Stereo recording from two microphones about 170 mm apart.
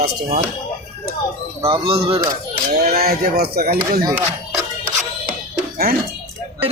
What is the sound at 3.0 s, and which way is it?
Speech, 65° right (ahead or behind).